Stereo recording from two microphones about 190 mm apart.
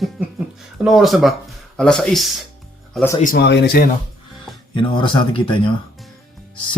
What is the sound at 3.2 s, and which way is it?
Speech, 55° left (ahead or behind).